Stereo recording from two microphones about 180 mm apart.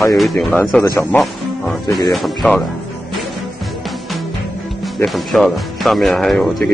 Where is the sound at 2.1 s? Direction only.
5° left (ahead or behind).